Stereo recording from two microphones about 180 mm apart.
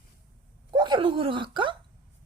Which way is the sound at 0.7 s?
25° right (ahead or behind).